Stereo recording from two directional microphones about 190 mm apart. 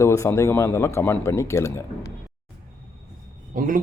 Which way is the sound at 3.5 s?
45° right (ahead or behind).